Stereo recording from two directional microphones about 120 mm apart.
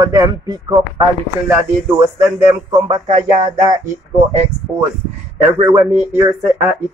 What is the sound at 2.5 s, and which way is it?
Speech, 30° right (ahead or behind).